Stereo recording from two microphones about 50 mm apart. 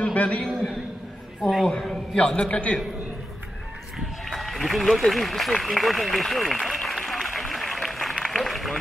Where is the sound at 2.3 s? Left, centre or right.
Left.